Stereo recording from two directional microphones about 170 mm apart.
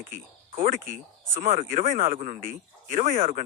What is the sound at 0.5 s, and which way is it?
Speech, 55° right (ahead or behind).